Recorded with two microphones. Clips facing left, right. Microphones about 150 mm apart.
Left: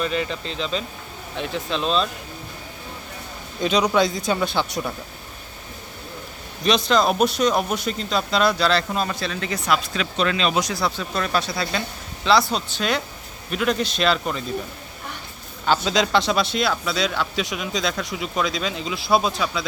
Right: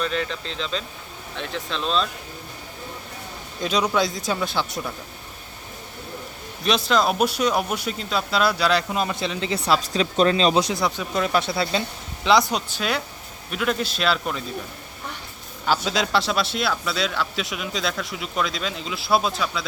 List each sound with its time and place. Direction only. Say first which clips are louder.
0.0 s a man's voice: left 2 dB; 5° left (ahead or behind)
3.6 s a man's voice: left 3 dB; centre (ahead or behind)
6.7 s a man's voice: left 2 dB; 5° right (ahead or behind)
15.6 s a man's voice: left 3 dB; 5° right (ahead or behind)